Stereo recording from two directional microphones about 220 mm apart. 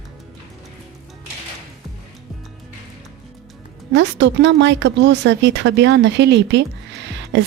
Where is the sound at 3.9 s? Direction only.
55° right (ahead or behind).